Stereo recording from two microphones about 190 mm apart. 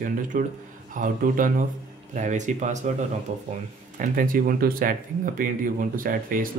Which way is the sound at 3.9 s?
45° right (ahead or behind).